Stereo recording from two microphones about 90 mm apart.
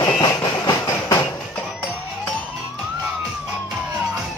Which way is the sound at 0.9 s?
30° left (ahead or behind).